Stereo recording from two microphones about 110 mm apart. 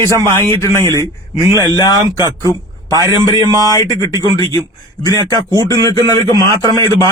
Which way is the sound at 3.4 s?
35° left (ahead or behind).